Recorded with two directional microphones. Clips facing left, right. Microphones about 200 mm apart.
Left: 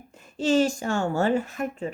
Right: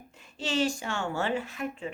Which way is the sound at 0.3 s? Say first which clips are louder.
Left 7 dB; 45° left (ahead or behind).